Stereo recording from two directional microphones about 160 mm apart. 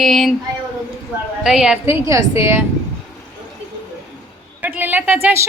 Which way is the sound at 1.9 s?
20° right (ahead or behind).